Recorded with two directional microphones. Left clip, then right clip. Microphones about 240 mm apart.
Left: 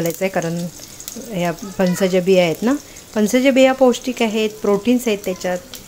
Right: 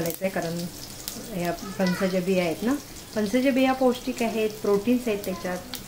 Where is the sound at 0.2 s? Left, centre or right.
Left.